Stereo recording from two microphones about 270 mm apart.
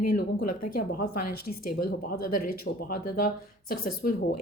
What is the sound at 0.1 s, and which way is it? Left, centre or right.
Speech, left.